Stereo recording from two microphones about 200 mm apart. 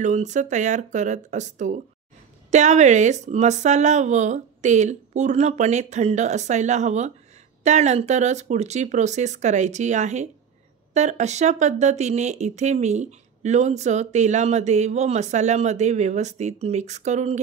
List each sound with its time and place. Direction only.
0.0 s speech: 35° right (ahead or behind)